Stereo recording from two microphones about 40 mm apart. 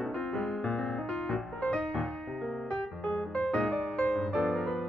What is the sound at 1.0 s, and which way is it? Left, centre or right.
Music, centre.